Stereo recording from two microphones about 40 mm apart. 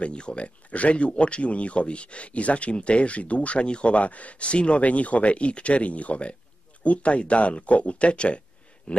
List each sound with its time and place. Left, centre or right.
0.0 s speech: left